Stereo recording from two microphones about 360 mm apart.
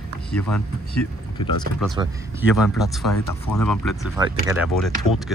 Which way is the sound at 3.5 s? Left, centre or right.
Left.